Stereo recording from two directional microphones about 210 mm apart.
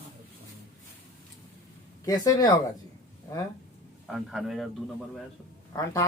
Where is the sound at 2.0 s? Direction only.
15° left (ahead or behind).